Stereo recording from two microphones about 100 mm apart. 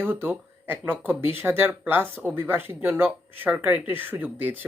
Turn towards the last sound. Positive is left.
turn(degrees=-20)  # may be behind; listen again after turning